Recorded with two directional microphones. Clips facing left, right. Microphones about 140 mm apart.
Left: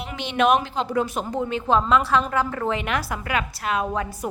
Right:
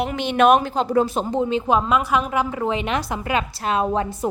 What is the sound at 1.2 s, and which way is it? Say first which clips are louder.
A woman's voice: right 3 dB; 20° right (ahead or behind).